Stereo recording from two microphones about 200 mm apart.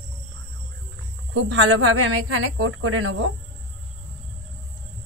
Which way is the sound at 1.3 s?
65° right (ahead or behind).